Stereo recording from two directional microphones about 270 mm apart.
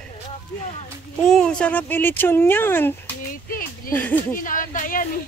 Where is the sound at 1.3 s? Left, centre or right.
Centre.